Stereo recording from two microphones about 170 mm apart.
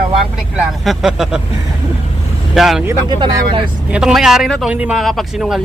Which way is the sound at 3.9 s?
5° right (ahead or behind).